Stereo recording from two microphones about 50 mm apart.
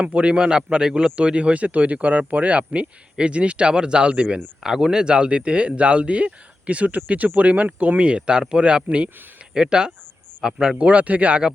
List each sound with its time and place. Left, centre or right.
0.0 s speech: right
4.6 s speech: centre
10.8 s speech: right